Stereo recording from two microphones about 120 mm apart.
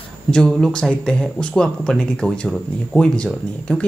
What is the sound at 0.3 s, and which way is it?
Speech, 5° left (ahead or behind).